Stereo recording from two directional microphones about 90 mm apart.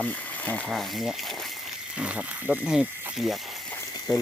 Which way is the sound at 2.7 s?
5° right (ahead or behind).